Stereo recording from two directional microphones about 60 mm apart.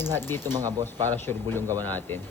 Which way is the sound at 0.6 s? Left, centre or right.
Right.